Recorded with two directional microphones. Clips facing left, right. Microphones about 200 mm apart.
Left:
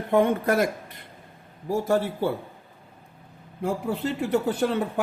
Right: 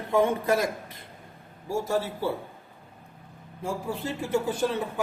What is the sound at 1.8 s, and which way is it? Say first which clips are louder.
Speech: left 5 dB; 60° left (ahead or behind).